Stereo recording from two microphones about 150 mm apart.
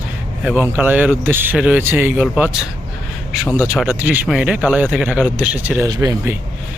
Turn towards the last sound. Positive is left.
turn(degrees=-10)  # may be behind; listen again after turning